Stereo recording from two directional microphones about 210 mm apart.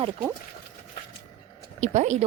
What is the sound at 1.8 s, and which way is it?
Speech, 35° right (ahead or behind).